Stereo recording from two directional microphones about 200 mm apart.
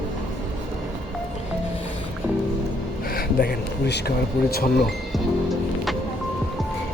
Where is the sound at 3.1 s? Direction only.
50° left (ahead or behind).